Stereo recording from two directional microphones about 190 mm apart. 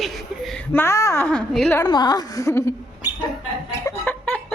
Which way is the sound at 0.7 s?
15° left (ahead or behind).